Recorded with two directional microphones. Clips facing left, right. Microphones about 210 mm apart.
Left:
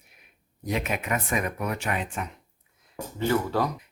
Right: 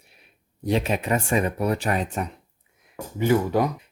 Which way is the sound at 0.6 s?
30° right (ahead or behind).